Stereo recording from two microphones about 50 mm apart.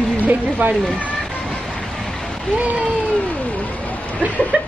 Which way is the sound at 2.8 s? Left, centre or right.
Left.